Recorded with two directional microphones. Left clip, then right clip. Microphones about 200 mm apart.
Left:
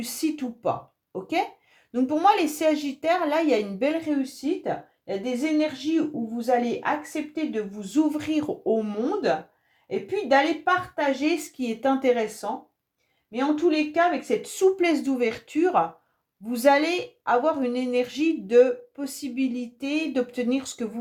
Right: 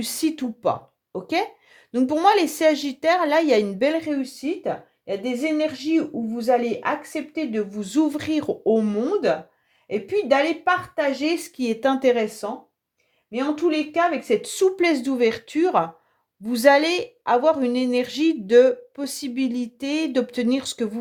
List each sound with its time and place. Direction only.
0.0 s a woman's voice: 45° right (ahead or behind)